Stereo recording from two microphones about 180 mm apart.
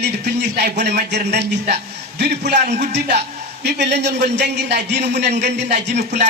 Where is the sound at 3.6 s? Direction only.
70° right (ahead or behind).